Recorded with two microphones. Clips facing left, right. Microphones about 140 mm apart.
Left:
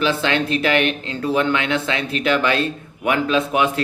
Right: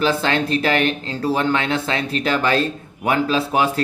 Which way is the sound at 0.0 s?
40° right (ahead or behind).